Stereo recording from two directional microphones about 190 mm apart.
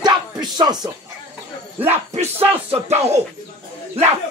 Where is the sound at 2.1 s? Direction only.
35° right (ahead or behind).